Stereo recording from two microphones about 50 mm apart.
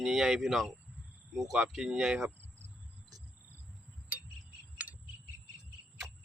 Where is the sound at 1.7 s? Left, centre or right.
Centre.